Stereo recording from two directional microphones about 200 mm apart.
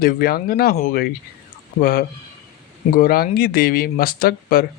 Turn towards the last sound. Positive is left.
turn(degrees=50)  # may be behind; listen again after turning